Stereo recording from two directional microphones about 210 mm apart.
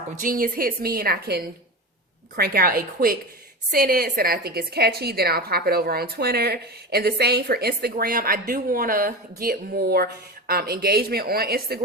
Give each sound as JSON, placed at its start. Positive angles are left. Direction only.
{"t": 0.2, "sound": "a woman's voice", "side_deg": -40}